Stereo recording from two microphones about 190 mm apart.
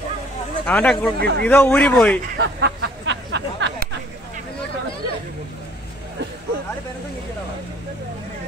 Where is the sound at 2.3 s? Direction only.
60° right (ahead or behind).